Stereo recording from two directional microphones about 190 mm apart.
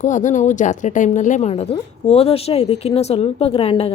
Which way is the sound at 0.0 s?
40° left (ahead or behind).